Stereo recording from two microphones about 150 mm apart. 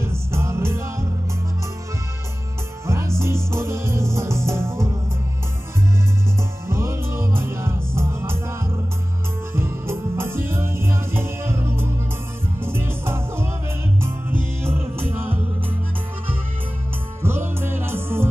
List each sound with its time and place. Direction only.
0.0 s music: 15° right (ahead or behind)
2.9 s music: 20° right (ahead or behind)
6.7 s music: 20° right (ahead or behind)
9.6 s music: 15° right (ahead or behind)
17.2 s music: 15° right (ahead or behind)